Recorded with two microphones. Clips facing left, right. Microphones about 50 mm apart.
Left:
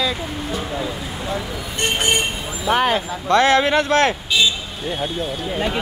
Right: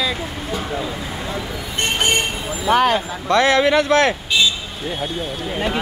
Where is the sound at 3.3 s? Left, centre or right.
Left.